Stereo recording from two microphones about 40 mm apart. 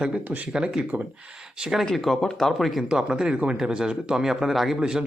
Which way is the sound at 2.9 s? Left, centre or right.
Right.